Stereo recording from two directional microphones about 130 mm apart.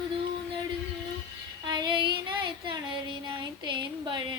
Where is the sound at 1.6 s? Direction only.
35° right (ahead or behind).